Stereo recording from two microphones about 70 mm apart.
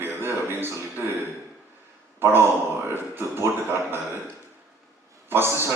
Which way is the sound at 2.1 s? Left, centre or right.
Right.